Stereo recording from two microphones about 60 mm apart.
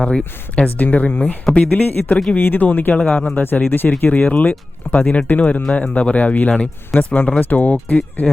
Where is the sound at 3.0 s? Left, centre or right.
Centre.